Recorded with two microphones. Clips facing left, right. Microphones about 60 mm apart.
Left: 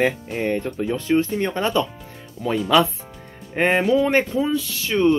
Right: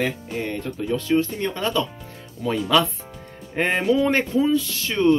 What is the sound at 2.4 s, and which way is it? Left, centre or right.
Speech, centre.